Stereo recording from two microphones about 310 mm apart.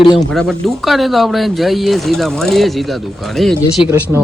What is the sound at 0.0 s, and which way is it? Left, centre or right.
Speech, centre.